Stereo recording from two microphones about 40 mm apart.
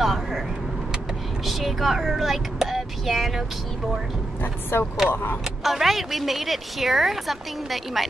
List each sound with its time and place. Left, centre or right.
0.0 s vehicle: centre
1.4 s a woman's voice: centre
4.7 s speech: left
5.1 s speech: left
5.6 s a woman's voice: centre